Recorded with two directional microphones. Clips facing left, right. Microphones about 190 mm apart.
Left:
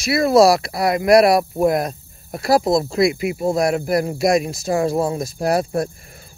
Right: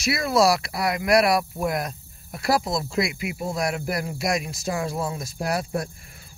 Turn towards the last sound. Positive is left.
turn(degrees=45)  # may be behind; listen again after turning